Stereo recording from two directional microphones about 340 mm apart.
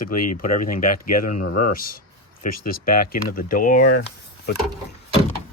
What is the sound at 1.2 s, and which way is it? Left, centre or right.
Speech, left.